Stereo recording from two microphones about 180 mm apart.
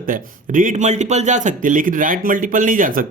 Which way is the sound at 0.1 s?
45° right (ahead or behind).